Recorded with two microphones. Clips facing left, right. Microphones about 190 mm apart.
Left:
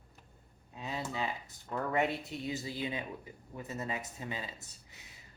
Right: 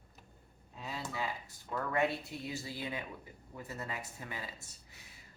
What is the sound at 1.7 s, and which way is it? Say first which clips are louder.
Speech: left 1 dB; 20° left (ahead or behind).